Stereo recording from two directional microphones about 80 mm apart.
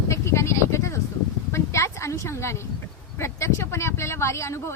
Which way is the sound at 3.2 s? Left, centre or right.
Left.